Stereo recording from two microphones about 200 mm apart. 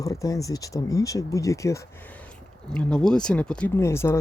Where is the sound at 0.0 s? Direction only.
15° left (ahead or behind).